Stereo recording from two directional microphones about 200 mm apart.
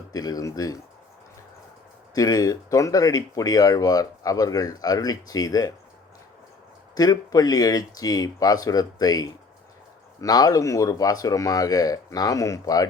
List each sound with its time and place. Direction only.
0.1 s speech: 20° left (ahead or behind)
2.1 s speech: 20° left (ahead or behind)
6.9 s speech: 20° left (ahead or behind)